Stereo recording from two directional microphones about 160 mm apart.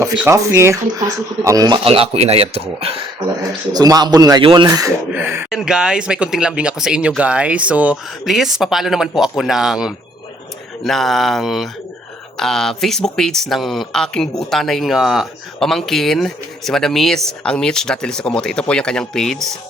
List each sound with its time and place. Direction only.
0.0 s speech: 20° right (ahead or behind)
1.8 s speech: 35° right (ahead or behind)
3.7 s speech: 25° right (ahead or behind)
5.1 s speech: 10° right (ahead or behind); by 19.4 s 5° left (ahead or behind)